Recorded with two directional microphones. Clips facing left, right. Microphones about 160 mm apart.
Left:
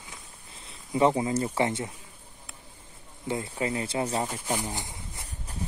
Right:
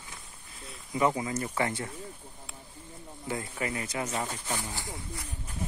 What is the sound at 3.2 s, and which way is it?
Speech, 25° left (ahead or behind).